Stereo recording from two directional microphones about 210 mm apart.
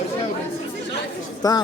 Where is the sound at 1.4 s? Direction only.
15° left (ahead or behind).